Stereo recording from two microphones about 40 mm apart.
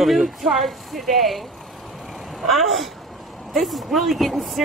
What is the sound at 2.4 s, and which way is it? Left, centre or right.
Speech, centre.